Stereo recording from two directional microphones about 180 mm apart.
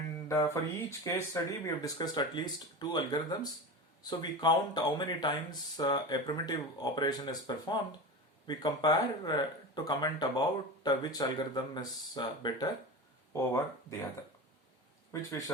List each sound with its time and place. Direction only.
0.3 s speech: 15° left (ahead or behind)
15.1 s speech: 15° left (ahead or behind)